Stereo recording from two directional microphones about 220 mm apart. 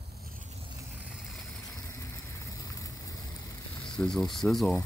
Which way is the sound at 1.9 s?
15° left (ahead or behind).